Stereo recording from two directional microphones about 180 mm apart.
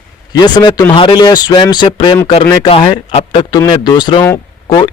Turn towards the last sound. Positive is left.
turn(degrees=20)  # may be behind; listen again after turning